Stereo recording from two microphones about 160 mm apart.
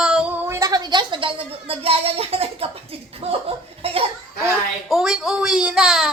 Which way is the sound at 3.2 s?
35° right (ahead or behind).